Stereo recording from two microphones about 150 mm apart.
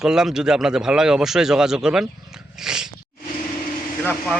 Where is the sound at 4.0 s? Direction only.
15° left (ahead or behind).